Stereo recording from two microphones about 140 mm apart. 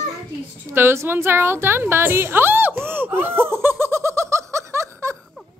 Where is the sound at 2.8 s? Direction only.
15° right (ahead or behind).